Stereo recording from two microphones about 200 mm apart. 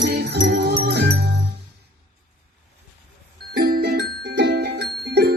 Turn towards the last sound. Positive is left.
turn(degrees=-55)  # may be behind; listen again after turning